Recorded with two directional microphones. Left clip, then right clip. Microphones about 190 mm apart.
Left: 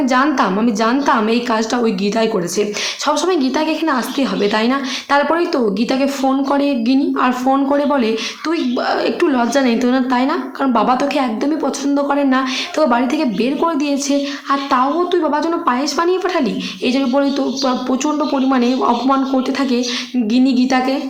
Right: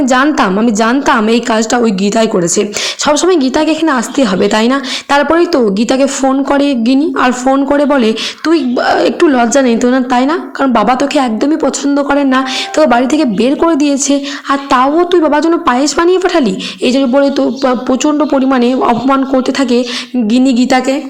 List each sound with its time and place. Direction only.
0.0 s a woman's voice: 30° right (ahead or behind)